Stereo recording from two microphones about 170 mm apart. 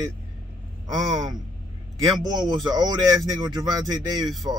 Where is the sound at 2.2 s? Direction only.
25° right (ahead or behind).